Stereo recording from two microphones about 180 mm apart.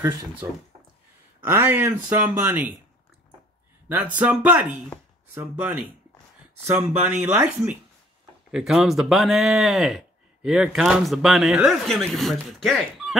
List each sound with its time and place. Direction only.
0.4 s speech: 15° right (ahead or behind)
3.9 s speech: 10° right (ahead or behind)